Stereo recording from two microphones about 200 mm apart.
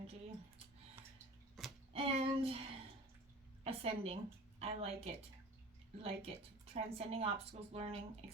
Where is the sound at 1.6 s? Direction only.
Centre (ahead or behind).